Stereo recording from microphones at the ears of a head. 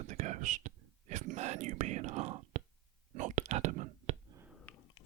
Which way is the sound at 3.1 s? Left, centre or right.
Right.